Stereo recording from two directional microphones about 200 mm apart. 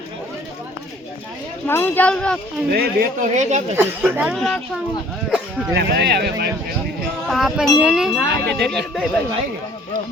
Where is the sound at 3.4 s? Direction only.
35° right (ahead or behind).